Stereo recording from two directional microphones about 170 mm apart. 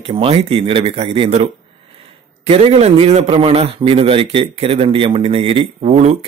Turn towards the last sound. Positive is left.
turn(degrees=-40)  # may be behind; listen again after turning